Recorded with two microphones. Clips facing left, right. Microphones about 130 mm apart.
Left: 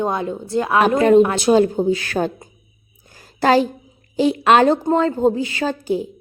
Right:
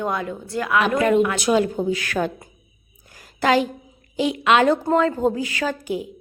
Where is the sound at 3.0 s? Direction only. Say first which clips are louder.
Left 3 dB; 30° left (ahead or behind).